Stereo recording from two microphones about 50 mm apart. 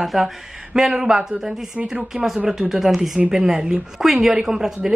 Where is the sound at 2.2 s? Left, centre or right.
Centre.